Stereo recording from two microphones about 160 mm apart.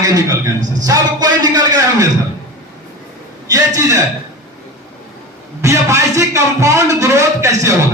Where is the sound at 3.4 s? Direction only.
20° right (ahead or behind).